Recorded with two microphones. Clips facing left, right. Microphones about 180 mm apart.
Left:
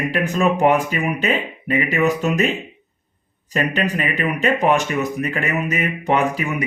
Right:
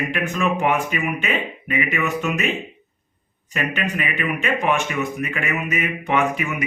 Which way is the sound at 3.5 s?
35° left (ahead or behind).